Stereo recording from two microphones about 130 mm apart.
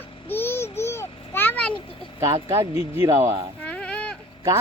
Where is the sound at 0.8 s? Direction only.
20° left (ahead or behind).